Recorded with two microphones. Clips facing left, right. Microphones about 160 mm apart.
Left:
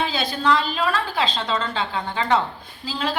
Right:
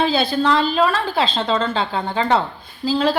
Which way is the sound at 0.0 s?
30° right (ahead or behind).